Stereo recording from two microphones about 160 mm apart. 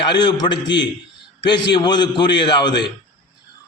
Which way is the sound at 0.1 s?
30° left (ahead or behind).